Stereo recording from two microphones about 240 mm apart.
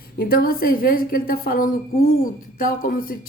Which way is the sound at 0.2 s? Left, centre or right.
Left.